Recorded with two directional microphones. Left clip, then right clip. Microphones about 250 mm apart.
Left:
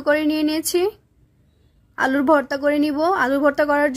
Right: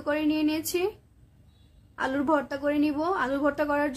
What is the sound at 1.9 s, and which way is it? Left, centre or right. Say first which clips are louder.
Speech: left 9 dB; left.